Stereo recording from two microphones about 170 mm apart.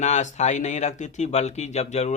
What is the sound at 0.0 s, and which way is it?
Speech, 45° left (ahead or behind).